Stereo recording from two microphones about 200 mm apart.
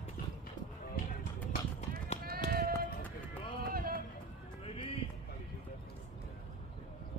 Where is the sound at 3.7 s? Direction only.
45° right (ahead or behind).